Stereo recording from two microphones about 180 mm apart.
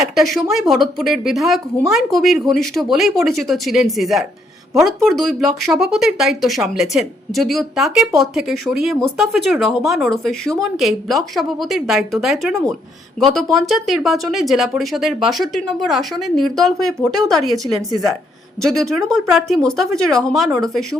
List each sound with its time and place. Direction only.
0.0 s speech: centre (ahead or behind)
17.9 s speech: 20° right (ahead or behind)
18.6 s speech: 5° left (ahead or behind)